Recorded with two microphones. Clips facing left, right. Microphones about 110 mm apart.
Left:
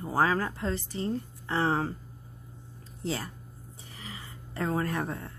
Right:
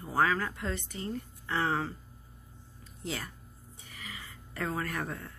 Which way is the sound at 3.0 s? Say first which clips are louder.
Left 5 dB; 35° left (ahead or behind).